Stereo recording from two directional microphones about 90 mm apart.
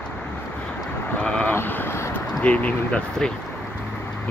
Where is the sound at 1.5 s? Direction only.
25° left (ahead or behind).